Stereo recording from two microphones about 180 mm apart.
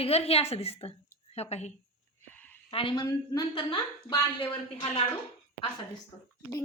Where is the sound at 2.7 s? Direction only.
30° left (ahead or behind).